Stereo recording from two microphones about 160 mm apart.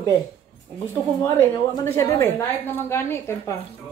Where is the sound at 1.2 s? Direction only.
15° left (ahead or behind).